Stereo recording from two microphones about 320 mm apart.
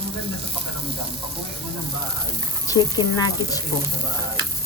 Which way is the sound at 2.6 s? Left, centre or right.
Centre.